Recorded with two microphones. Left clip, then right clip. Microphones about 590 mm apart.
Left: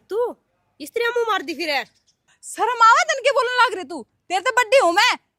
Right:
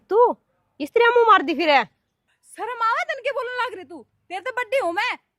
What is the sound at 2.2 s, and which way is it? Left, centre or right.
A woman's voice, left.